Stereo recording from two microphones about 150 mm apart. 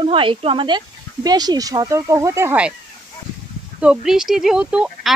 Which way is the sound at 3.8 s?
5° right (ahead or behind).